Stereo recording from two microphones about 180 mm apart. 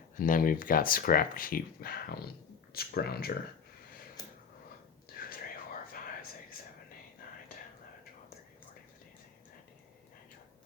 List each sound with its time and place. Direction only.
0.2 s speech: 50° left (ahead or behind)
5.1 s whispering: 55° left (ahead or behind)